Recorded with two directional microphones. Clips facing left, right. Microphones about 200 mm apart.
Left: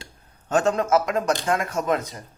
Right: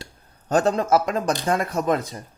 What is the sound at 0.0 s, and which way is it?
A man's voice, 35° right (ahead or behind).